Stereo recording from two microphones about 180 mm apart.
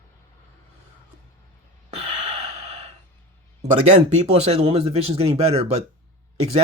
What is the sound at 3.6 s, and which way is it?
Speech, 35° right (ahead or behind).